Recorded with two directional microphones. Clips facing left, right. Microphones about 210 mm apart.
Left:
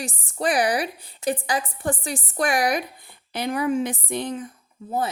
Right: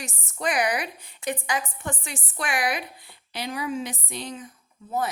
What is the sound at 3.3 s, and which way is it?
A woman's voice, 55° left (ahead or behind).